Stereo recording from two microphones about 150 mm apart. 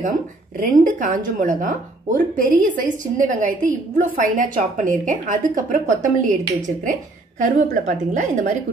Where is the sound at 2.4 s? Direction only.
60° right (ahead or behind).